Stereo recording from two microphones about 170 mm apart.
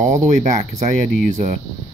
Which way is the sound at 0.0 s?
45° right (ahead or behind).